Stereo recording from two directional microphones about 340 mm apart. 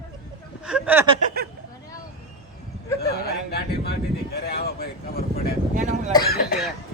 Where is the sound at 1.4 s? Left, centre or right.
Right.